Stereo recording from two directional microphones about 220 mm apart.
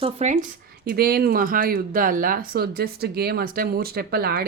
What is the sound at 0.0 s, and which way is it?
Speech, 30° right (ahead or behind).